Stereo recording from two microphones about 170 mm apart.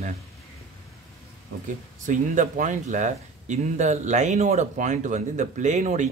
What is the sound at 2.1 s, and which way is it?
Speech, 50° right (ahead or behind).